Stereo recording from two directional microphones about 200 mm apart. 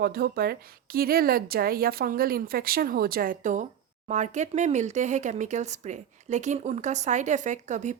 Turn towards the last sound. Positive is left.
turn(degrees=-35)  # may be behind; listen again after turning